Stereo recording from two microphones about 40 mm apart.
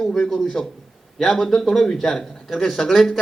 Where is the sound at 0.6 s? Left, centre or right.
Centre.